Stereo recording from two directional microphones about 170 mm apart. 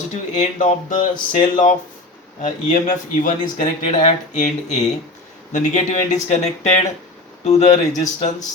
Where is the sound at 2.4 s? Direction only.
50° left (ahead or behind).